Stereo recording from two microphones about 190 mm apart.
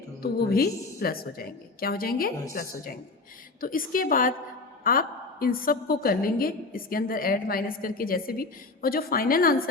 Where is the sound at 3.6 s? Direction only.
50° left (ahead or behind).